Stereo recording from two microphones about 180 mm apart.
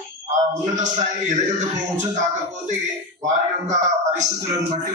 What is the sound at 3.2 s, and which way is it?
A man's voice, 45° right (ahead or behind).